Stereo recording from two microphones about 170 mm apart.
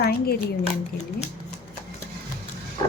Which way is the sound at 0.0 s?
65° left (ahead or behind).